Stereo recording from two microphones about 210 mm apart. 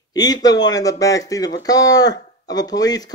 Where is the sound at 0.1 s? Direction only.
20° left (ahead or behind).